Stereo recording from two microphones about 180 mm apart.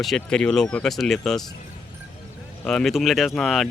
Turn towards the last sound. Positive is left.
turn(degrees=0)  # may be behind; listen again after turning